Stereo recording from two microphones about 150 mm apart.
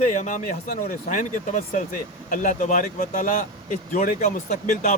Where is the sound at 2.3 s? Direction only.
60° left (ahead or behind).